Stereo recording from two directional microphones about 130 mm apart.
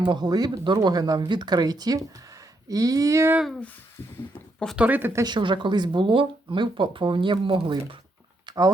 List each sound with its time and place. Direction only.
0.0 s speech: 35° right (ahead or behind)
3.3 s speech: centre (ahead or behind)
4.8 s speech: 15° right (ahead or behind)
5.2 s speech: 35° right (ahead or behind)
8.4 s a sound: 30° right (ahead or behind)